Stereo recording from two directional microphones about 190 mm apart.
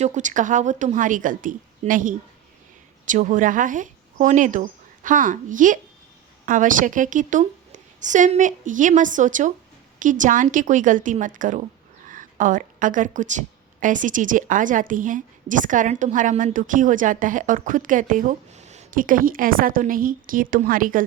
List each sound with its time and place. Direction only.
0.0 s a woman's voice: 40° right (ahead or behind)